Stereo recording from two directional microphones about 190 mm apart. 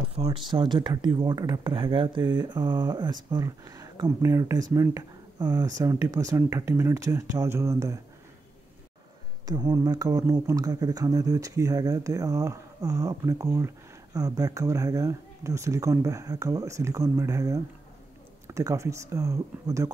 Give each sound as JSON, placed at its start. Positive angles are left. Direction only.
{"t": 0.1, "sound": "speech", "side_deg": -30}
{"t": 9.5, "sound": "speech", "side_deg": -20}